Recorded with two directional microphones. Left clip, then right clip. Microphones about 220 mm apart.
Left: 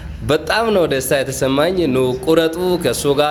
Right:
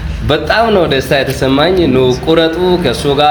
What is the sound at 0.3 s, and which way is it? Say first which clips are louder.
Speech: right 5 dB; 45° left (ahead or behind).